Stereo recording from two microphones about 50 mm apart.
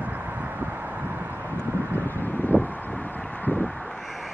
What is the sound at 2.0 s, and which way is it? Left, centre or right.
Wind, left.